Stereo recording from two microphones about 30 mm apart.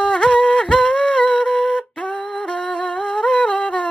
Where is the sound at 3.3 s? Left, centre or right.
Left.